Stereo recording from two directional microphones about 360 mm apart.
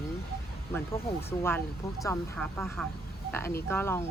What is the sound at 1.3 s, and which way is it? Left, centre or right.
Speech, centre.